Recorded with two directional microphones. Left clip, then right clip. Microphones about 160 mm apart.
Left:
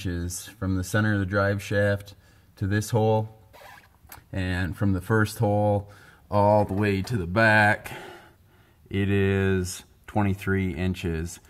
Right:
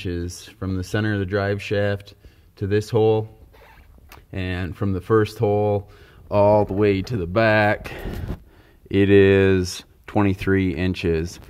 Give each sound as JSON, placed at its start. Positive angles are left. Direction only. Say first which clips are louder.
{"t": 0.0, "sound": "speech", "louder": "right 5 dB", "side_deg": -25}